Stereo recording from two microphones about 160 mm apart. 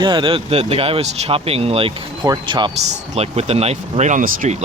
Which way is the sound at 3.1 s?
40° right (ahead or behind).